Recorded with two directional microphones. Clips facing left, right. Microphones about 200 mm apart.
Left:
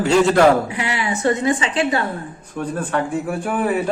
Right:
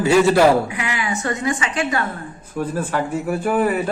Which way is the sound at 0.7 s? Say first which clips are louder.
Left 2 dB; 30° left (ahead or behind).